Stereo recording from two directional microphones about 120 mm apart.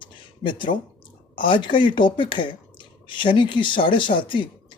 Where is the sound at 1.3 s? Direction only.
45° left (ahead or behind).